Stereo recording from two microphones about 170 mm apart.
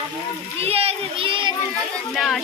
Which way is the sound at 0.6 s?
35° right (ahead or behind).